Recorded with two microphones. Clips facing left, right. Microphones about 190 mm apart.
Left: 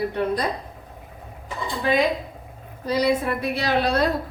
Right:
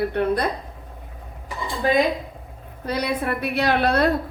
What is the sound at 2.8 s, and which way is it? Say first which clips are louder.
A woman's voice: left 3 dB; 60° right (ahead or behind).